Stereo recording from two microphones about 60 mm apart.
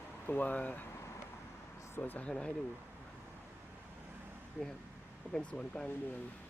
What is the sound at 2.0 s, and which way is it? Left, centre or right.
Speech, left.